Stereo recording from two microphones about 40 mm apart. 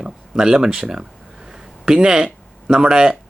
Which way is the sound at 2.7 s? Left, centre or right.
Centre.